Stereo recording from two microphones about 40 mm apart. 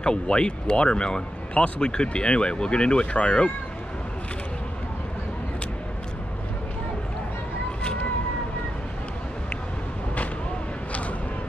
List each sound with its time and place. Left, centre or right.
0.0 s speech: left
7.8 s vehicle: left
10.9 s vehicle: left